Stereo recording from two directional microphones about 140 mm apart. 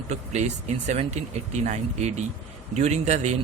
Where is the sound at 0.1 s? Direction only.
55° right (ahead or behind).